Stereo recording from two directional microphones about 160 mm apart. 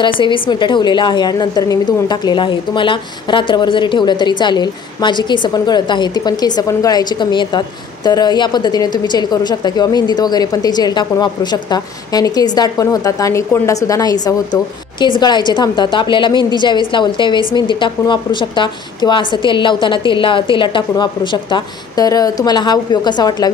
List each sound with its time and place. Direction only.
0.0 s a woman's voice: 30° left (ahead or behind)